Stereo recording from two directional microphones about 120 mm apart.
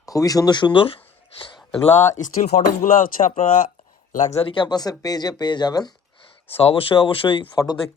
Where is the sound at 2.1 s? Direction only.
85° left.